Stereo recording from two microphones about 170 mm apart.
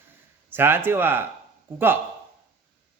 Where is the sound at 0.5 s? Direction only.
15° right (ahead or behind).